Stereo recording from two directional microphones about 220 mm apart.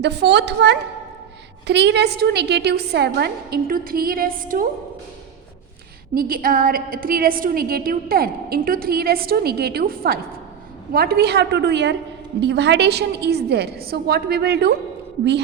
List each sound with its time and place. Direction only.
0.0 s a woman's voice: 50° right (ahead or behind)
6.1 s a woman's voice: 40° right (ahead or behind)